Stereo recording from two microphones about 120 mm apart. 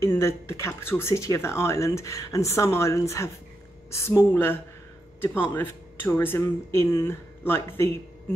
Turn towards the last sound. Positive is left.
turn(degrees=20)  # may be behind; listen again after turning